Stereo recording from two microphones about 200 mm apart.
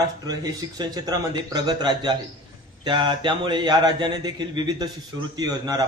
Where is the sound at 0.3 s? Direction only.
20° right (ahead or behind).